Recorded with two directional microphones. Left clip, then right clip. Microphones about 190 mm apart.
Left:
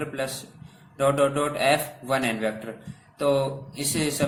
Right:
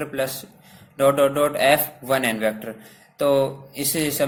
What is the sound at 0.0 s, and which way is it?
A man's voice, 40° right (ahead or behind).